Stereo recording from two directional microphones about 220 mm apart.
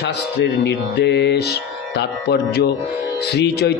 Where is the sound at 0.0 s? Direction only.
50° left (ahead or behind).